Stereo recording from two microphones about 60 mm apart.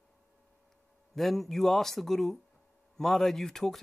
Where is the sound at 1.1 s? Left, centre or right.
Centre.